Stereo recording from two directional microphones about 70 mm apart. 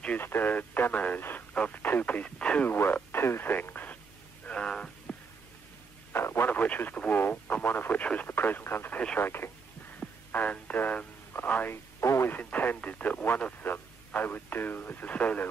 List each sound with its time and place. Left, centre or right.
0.2 s speech: left
1.6 s radio: left
2.7 s radio: left
4.5 s a sound: centre
6.1 s radio: left
6.5 s radio: left
9.2 s speech: left
9.9 s radio: left
11.7 s radio: left
12.3 s radio: left